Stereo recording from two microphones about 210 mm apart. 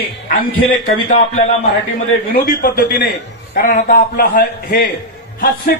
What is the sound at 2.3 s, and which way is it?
A man's voice, 45° left (ahead or behind).